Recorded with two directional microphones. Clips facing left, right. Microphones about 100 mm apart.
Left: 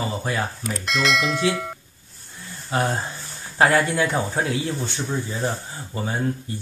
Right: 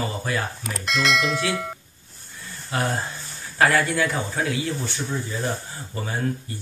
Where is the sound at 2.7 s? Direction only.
25° left (ahead or behind).